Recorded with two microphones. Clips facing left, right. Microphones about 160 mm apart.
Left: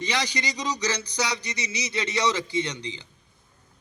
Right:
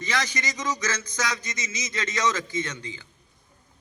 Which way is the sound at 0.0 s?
15° left (ahead or behind).